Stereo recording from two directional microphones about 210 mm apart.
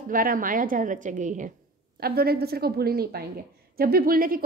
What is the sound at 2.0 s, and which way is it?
A woman's voice, 45° right (ahead or behind).